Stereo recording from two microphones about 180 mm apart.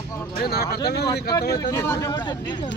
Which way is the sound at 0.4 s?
60° left (ahead or behind).